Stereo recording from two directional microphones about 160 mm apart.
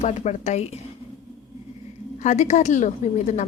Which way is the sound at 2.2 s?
50° left (ahead or behind).